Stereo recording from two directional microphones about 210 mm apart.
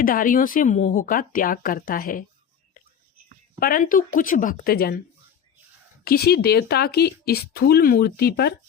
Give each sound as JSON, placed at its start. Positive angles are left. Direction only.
{"t": 0.0, "sound": "speech", "side_deg": 40}
{"t": 3.6, "sound": "speech", "side_deg": 40}
{"t": 6.1, "sound": "speech", "side_deg": 50}